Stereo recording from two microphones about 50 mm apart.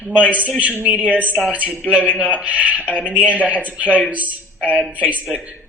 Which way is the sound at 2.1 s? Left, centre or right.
Right.